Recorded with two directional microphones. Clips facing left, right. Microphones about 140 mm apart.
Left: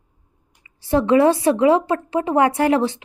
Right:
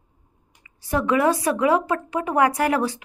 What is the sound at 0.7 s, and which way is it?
A woman's voice, 30° left (ahead or behind).